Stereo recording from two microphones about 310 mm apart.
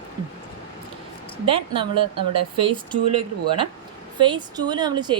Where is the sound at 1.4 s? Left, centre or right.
Centre.